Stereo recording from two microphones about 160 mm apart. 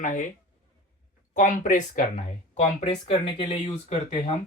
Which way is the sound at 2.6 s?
35° left (ahead or behind).